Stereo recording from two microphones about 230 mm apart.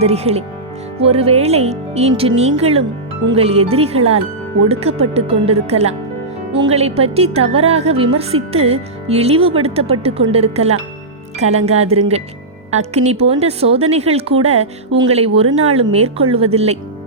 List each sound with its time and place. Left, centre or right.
0.0 s a woman's voice: right
15.4 s speech: right
15.7 s a woman's voice: right